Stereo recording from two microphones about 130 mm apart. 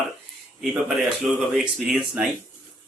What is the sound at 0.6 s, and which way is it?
Speech, 5° right (ahead or behind).